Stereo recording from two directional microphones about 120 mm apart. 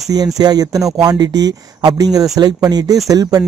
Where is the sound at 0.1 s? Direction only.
35° right (ahead or behind).